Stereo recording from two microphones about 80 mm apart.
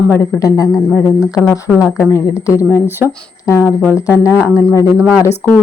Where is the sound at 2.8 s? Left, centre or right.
Right.